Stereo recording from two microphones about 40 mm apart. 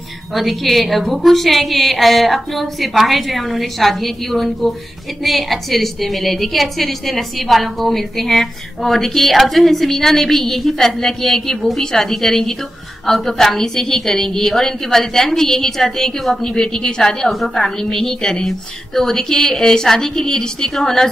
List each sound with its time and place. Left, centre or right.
0.3 s a woman's voice: centre